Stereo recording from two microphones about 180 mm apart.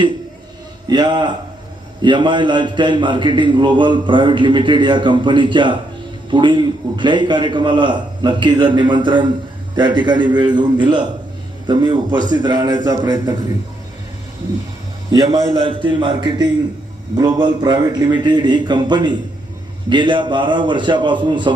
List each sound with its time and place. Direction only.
0.9 s a man's voice: 25° right (ahead or behind)
15.1 s a man's voice: 25° right (ahead or behind)